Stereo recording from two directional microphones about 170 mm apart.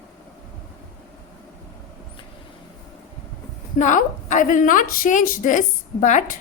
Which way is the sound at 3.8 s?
45° left (ahead or behind).